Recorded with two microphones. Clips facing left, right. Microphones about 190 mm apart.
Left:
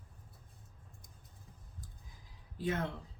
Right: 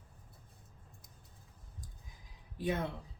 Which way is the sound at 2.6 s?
15° right (ahead or behind).